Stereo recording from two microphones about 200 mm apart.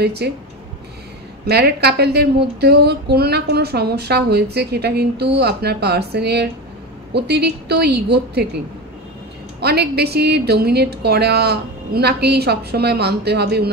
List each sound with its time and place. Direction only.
0.0 s a woman's voice: 55° right (ahead or behind)
1.4 s a woman's voice: 55° right (ahead or behind)
9.6 s a woman's voice: 55° right (ahead or behind)